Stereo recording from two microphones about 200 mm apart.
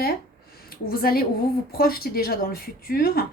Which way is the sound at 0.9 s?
50° left (ahead or behind).